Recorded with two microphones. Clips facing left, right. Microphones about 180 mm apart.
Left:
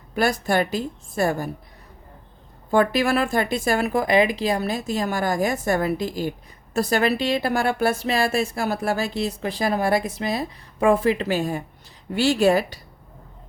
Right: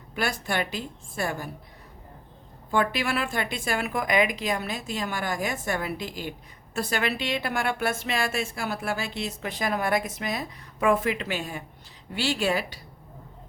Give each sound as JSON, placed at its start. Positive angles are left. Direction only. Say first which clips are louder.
{"t": 0.2, "sound": "a woman's voice", "louder": "left 7 dB", "side_deg": 40}
{"t": 2.6, "sound": "a woman's voice", "louder": "left 7 dB", "side_deg": 40}